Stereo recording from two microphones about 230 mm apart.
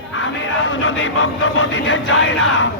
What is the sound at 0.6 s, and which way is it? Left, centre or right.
Music, left.